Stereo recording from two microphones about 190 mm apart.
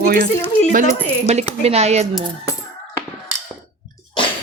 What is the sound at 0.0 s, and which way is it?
Speech, 50° right (ahead or behind).